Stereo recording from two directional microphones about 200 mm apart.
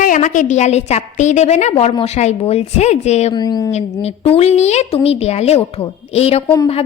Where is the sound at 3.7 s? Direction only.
35° left (ahead or behind).